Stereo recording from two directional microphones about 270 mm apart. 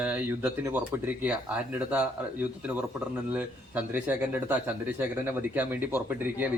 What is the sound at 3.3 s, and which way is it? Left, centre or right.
Speech, centre.